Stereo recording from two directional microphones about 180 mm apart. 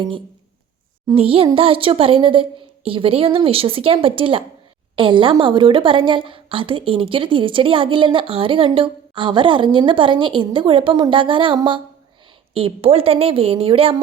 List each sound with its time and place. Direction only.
1.1 s a woman's voice: 30° right (ahead or behind)